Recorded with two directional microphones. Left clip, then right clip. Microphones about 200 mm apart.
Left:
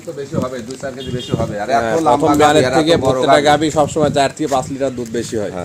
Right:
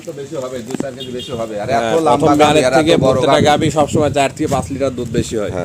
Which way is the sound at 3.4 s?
Centre (ahead or behind).